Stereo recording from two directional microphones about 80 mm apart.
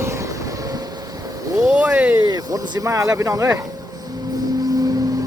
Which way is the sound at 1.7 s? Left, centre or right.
Centre.